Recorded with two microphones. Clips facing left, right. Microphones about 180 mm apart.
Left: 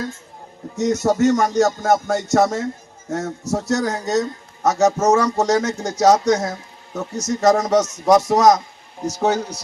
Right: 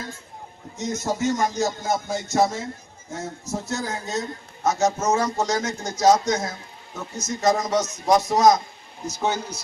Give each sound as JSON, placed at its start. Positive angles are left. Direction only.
{"t": 0.8, "sound": "a man's voice", "side_deg": 70}
{"t": 6.4, "sound": "speech", "side_deg": 40}
{"t": 7.2, "sound": "a man's voice", "side_deg": 75}